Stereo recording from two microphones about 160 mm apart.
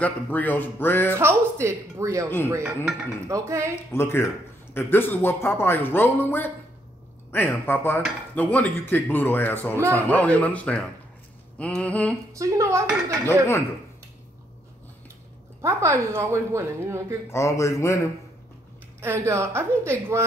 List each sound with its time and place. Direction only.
0.0 s speech: 10° left (ahead or behind)
1.1 s a woman's voice: 15° right (ahead or behind)
3.7 s speech: 15° left (ahead or behind)
12.3 s speech: 20° right (ahead or behind)
13.3 s speech: 15° left (ahead or behind)
15.6 s a woman's voice: 20° right (ahead or behind)
17.3 s speech: 20° left (ahead or behind)
18.9 s a woman's voice: 15° right (ahead or behind)